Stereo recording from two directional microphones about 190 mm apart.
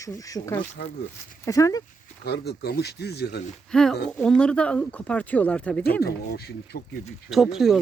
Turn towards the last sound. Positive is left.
turn(degrees=0)  # may be behind; listen again after turning